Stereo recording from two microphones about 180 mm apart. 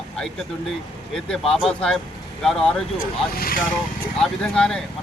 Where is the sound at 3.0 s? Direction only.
55° left (ahead or behind).